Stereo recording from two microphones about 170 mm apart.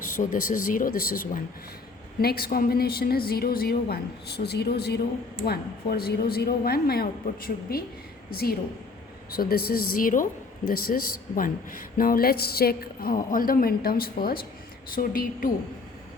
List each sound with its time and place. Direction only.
0.2 s a man's voice: 55° left (ahead or behind)